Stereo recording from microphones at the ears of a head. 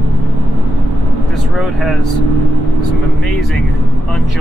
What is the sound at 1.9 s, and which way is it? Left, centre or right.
Speech, right.